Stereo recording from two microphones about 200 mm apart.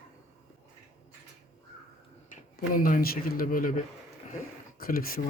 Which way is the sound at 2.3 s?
45° left (ahead or behind).